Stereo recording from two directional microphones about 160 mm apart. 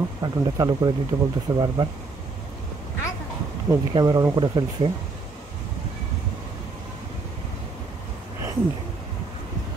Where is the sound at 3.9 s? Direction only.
25° right (ahead or behind).